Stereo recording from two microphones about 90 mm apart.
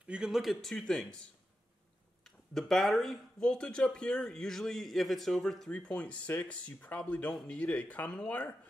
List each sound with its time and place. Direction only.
0.0 s speech: 10° right (ahead or behind); by 1.2 s 10° left (ahead or behind)
2.2 s speech: 5° left (ahead or behind)